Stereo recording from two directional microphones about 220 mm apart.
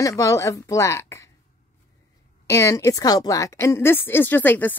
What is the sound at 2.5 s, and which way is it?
A woman's voice, 15° left (ahead or behind).